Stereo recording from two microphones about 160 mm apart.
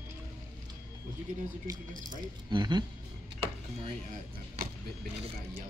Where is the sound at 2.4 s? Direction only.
30° right (ahead or behind).